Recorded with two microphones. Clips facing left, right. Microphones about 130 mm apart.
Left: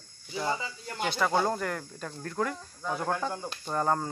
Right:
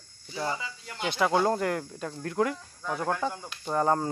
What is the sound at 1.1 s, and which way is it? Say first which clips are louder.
Speech: right 3 dB; 20° right (ahead or behind).